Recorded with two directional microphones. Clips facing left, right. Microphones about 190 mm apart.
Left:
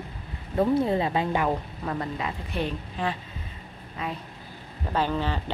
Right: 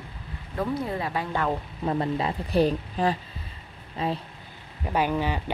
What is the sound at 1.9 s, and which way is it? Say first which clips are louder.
A woman's voice: right 5 dB; 30° right (ahead or behind).